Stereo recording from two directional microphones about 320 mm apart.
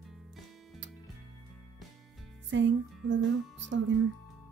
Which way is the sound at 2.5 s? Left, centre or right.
Right.